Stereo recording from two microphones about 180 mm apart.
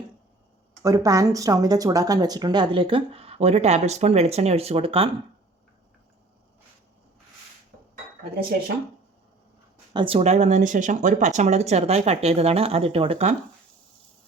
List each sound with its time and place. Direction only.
0.8 s speech: 20° right (ahead or behind)
9.9 s speech: 30° right (ahead or behind)